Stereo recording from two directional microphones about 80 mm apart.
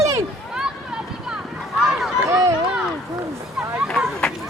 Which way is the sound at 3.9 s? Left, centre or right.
Centre.